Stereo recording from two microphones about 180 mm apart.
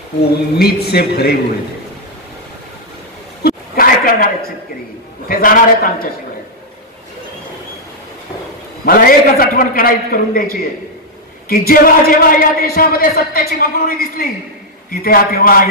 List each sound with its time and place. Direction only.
0.6 s a man's voice: 60° left (ahead or behind)
3.4 s chuckle: 55° left (ahead or behind)
5.3 s a man's voice: 50° left (ahead or behind)
8.8 s a man's voice: 55° left (ahead or behind)